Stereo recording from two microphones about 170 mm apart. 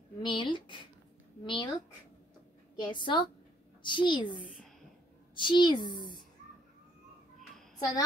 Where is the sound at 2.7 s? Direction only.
25° left (ahead or behind).